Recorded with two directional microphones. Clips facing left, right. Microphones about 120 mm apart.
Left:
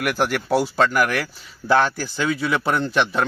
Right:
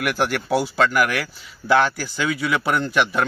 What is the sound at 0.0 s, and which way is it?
Speech, centre (ahead or behind).